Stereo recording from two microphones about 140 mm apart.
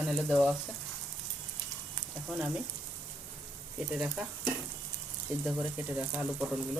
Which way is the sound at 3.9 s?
5° right (ahead or behind).